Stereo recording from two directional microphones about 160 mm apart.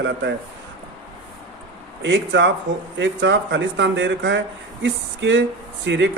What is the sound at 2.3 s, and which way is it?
Speech, 90° right.